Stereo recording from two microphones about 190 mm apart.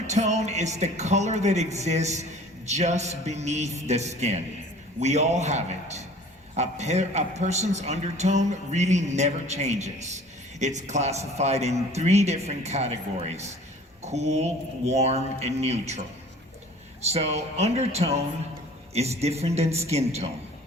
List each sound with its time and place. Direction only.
0.1 s a man's voice: 35° right (ahead or behind)
17.1 s a man's voice: 35° right (ahead or behind)